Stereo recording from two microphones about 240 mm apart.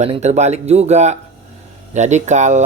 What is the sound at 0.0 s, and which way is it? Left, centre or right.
Speech, right.